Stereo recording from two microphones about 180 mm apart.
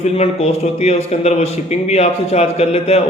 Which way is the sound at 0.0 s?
35° left (ahead or behind).